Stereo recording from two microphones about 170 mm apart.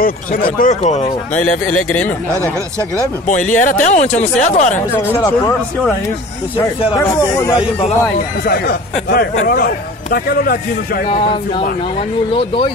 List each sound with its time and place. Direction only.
0.0 s a man's voice: 55° left (ahead or behind)
0.6 s speech: 45° left (ahead or behind)
1.7 s speech: 5° left (ahead or behind)
3.3 s speech: 50° left (ahead or behind)
5.1 s speech: 20° left (ahead or behind)
7.0 s speech: 20° left (ahead or behind)
8.5 s a man's voice: 60° left (ahead or behind)
11.1 s speech: 30° left (ahead or behind)